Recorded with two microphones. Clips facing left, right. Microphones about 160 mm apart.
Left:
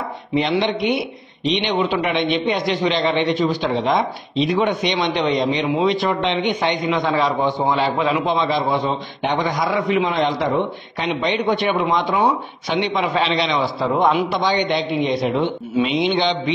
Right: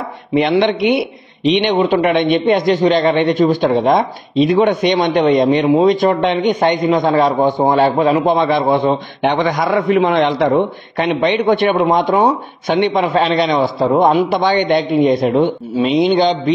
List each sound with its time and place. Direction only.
0.3 s a man's voice: 60° right (ahead or behind); by 16.5 s 40° right (ahead or behind)